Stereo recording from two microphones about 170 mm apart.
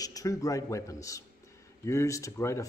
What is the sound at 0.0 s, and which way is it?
A man's voice, 20° left (ahead or behind).